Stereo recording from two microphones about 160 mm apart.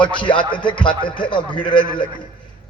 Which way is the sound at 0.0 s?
30° left (ahead or behind).